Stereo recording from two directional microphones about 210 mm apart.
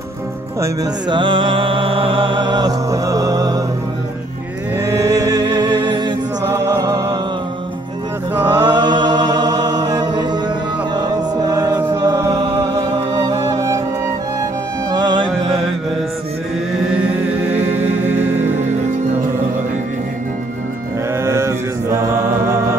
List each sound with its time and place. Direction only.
0.6 s music: 20° right (ahead or behind)
4.8 s music: 15° right (ahead or behind)
8.4 s chant: 20° right (ahead or behind)
11.0 s music: 20° right (ahead or behind)
14.9 s music: 20° right (ahead or behind)
21.2 s mantra: 15° right (ahead or behind)
22.2 s music: 10° right (ahead or behind)